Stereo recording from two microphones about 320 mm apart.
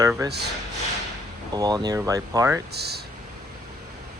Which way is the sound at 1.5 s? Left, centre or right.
Centre.